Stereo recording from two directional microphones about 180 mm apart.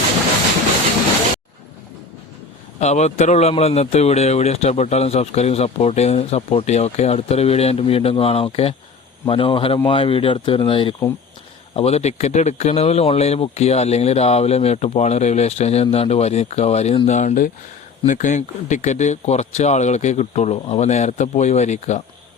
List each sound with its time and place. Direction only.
2.7 s speech: 40° left (ahead or behind)